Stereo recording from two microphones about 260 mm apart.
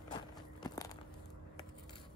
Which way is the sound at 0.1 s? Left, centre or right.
Centre.